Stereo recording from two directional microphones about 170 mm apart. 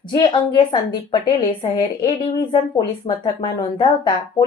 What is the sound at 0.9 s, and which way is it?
Speech, 25° left (ahead or behind).